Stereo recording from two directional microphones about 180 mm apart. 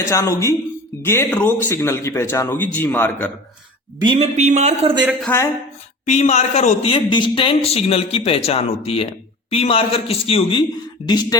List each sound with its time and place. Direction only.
0.0 s speech: 15° left (ahead or behind)
4.0 s speech: 30° right (ahead or behind)
5.2 s speech: 10° left (ahead or behind)
6.1 s speech: 40° left (ahead or behind)
6.9 s speech: 25° left (ahead or behind)